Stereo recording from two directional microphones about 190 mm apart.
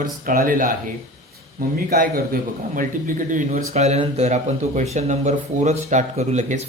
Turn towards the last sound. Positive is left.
turn(degrees=-40)  # may be behind; listen again after turning